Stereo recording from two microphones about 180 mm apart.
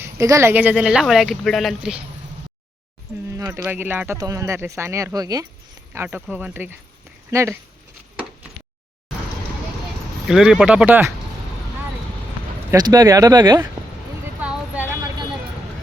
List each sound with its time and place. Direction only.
0.0 s speech: 15° right (ahead or behind)
3.3 s speech: 15° right (ahead or behind)
10.2 s speech: centre (ahead or behind)
12.7 s speech: 20° right (ahead or behind)
14.4 s a sound: 10° right (ahead or behind)